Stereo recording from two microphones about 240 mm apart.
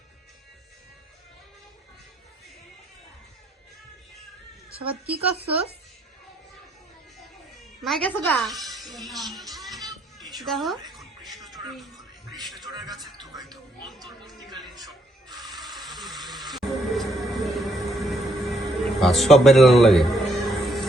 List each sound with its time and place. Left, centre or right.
4.8 s speech: right
7.8 s a woman's voice: centre
10.9 s music: centre
12.7 s speech: centre
13.8 s speech: centre
14.6 s mechanisms: centre